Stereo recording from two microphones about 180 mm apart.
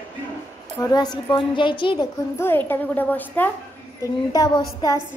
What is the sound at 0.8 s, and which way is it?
A woman's voice, 20° left (ahead or behind).